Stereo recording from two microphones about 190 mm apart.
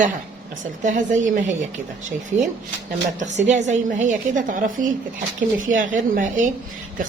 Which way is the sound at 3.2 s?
40° right (ahead or behind).